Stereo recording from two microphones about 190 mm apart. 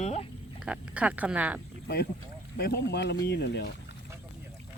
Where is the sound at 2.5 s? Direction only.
60° left (ahead or behind).